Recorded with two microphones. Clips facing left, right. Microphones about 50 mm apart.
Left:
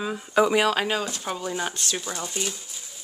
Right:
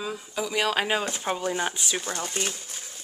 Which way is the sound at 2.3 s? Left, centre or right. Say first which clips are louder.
Even; right.